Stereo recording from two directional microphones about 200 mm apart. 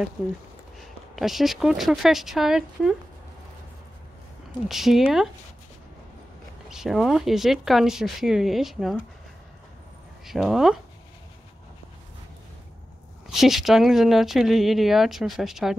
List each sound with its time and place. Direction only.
1.1 s speech: centre (ahead or behind)
4.6 s speech: centre (ahead or behind)
6.7 s speech: centre (ahead or behind)
10.2 s speech: centre (ahead or behind)
13.3 s speech: centre (ahead or behind)